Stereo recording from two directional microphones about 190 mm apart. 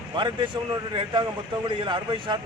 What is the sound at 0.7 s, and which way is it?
Speech, 20° right (ahead or behind).